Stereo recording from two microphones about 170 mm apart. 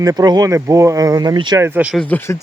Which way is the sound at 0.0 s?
20° right (ahead or behind).